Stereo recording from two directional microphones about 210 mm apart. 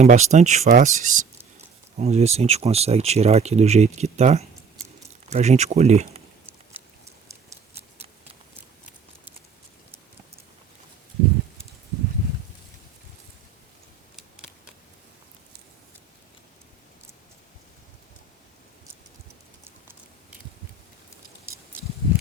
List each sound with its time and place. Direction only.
0.0 s speech: 35° right (ahead or behind)